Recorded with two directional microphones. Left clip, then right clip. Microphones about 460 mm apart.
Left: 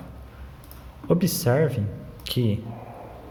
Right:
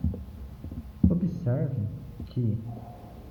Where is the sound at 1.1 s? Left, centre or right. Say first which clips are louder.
Left 10 dB; left.